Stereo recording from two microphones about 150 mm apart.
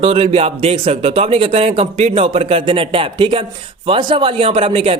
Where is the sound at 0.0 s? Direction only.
40° right (ahead or behind).